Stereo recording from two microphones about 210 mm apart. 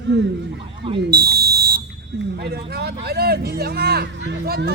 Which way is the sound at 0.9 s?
45° right (ahead or behind).